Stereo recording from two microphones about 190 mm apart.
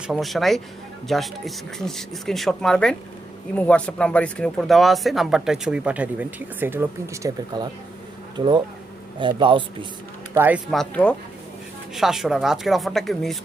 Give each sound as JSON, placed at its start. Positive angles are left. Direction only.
{"t": 0.1, "sound": "speech", "side_deg": 0}
{"t": 9.1, "sound": "speech", "side_deg": -25}
{"t": 10.3, "sound": "speech", "side_deg": -10}
{"t": 10.7, "sound": "speech", "side_deg": 5}